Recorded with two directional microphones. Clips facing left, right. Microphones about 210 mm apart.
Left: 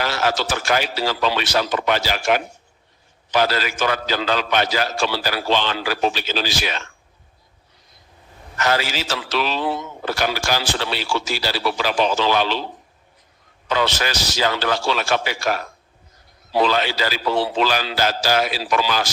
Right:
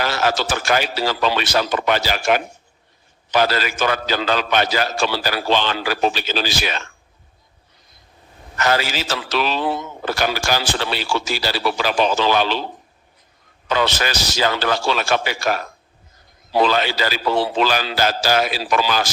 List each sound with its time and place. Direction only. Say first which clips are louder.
0.0 s a man's voice: right 1 dB; 50° right (ahead or behind)
8.5 s a man's voice: right 1 dB; 50° right (ahead or behind)
13.7 s a man's voice: right 1 dB; 50° right (ahead or behind)